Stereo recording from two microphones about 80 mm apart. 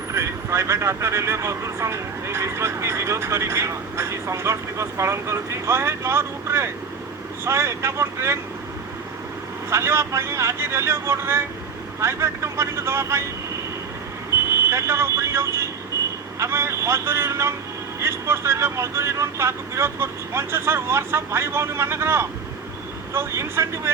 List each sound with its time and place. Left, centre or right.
0.1 s speech: right
9.6 s speech: right
14.7 s speech: right